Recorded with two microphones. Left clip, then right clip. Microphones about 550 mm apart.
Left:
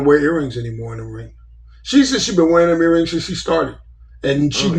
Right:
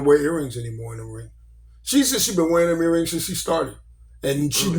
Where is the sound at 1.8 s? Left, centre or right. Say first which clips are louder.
Left 5 dB; right.